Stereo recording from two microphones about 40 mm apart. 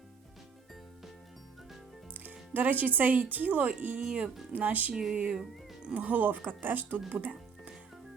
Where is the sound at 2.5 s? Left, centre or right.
Right.